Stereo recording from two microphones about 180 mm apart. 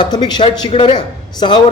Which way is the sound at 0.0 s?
25° left (ahead or behind).